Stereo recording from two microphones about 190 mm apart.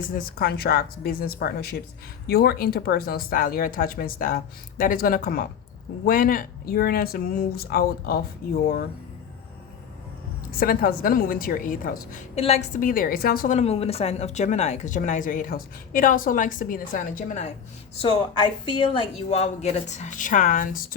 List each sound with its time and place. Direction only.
0.1 s a woman's voice: 55° left (ahead or behind)
10.6 s a woman's voice: 50° left (ahead or behind)
12.4 s a woman's voice: 35° left (ahead or behind)
17.9 s speech: 30° left (ahead or behind)